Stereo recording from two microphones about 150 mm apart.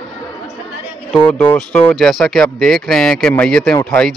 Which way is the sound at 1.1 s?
10° left (ahead or behind).